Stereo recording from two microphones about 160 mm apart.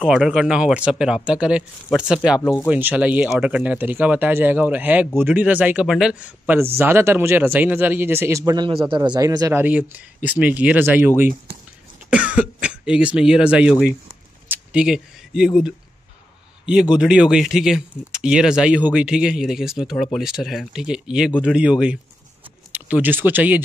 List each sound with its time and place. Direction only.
0.0 s speech: 5° right (ahead or behind)
2.4 s speech: 15° left (ahead or behind)
2.7 s a man's voice: 10° right (ahead or behind)
9.6 s a man's voice: 10° right (ahead or behind)
16.9 s speech: 5° right (ahead or behind)